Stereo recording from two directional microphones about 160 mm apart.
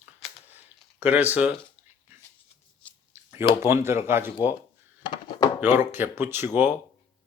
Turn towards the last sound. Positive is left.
turn(degrees=-15)  # may be behind; listen again after turning